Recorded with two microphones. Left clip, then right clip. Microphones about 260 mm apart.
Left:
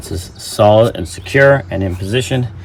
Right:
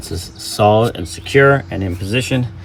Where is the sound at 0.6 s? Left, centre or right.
Centre.